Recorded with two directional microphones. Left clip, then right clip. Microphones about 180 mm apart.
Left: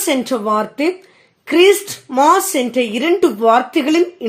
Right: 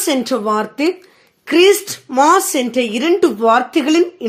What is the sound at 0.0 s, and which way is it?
A woman's voice, 20° right (ahead or behind).